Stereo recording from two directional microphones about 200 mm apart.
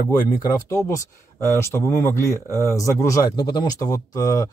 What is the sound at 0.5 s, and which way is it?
Speech, 15° left (ahead or behind).